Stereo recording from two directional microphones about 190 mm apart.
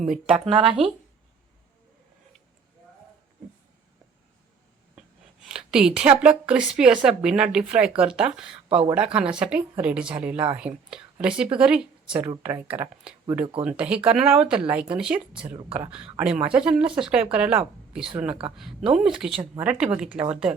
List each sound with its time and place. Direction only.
0.0 s a woman's voice: 5° right (ahead or behind)
0.3 s speech: 30° right (ahead or behind)
5.5 s a woman's voice: 5° right (ahead or behind)
13.4 s speech: 30° right (ahead or behind)
13.7 s a woman's voice: 5° right (ahead or behind)